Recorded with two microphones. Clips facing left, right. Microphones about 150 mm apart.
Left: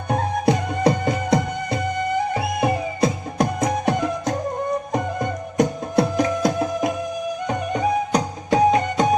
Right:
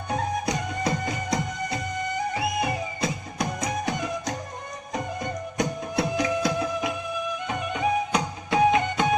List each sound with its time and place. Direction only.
0.1 s music: 55° left (ahead or behind); by 9.1 s 40° left (ahead or behind)